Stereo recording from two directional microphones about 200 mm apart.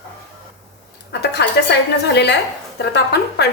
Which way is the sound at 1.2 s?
55° left (ahead or behind).